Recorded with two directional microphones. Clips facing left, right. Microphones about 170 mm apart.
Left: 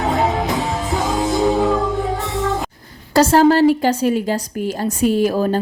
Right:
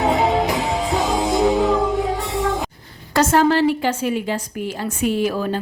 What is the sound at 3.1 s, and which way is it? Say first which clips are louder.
A woman's voice: left 4 dB; 35° left (ahead or behind).